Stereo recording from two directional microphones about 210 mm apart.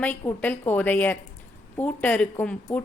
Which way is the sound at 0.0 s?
10° left (ahead or behind).